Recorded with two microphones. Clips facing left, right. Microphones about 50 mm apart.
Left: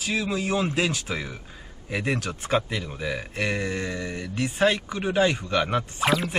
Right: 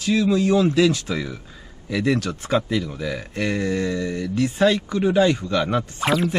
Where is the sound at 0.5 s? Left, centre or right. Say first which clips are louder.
Right 7 dB; left.